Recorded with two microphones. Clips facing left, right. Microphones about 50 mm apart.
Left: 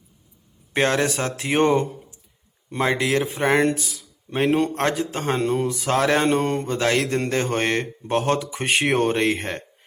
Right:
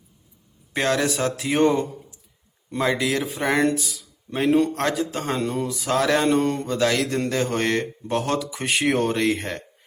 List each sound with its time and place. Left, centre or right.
0.7 s a man's voice: left